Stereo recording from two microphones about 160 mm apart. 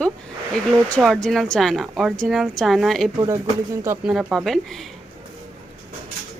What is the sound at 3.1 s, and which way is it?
Speech, 20° right (ahead or behind).